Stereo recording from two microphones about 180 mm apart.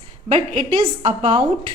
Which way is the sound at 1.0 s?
35° right (ahead or behind).